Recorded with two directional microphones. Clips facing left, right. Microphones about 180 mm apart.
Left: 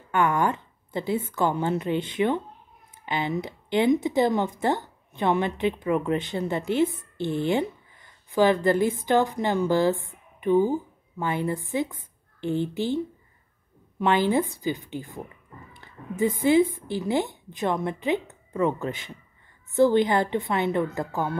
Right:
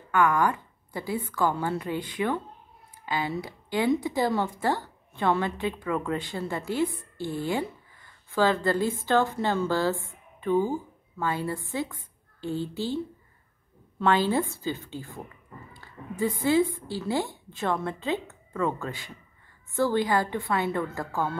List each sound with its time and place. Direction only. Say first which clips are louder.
0.1 s a woman's voice: even; 25° left (ahead or behind)